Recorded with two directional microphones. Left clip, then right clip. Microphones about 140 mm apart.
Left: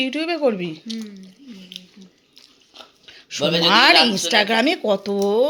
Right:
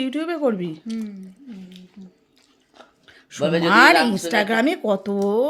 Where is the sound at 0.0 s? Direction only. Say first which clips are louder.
Left 2 dB; 25° right (ahead or behind).